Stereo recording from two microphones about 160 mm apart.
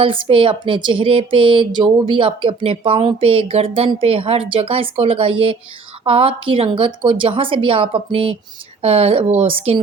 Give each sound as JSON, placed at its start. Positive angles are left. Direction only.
{"t": 0.0, "sound": "speech", "side_deg": -35}